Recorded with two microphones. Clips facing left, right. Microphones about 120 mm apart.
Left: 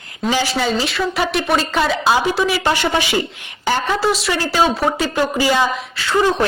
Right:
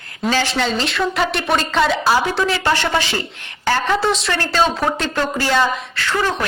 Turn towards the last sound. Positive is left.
turn(degrees=15)  # may be behind; listen again after turning